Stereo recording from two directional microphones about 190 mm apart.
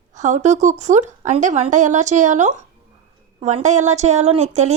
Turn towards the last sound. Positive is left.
turn(degrees=-35)  # may be behind; listen again after turning